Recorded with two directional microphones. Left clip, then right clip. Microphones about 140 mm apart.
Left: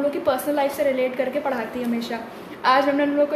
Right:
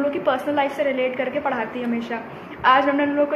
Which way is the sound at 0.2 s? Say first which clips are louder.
Right 1 dB; 15° left (ahead or behind).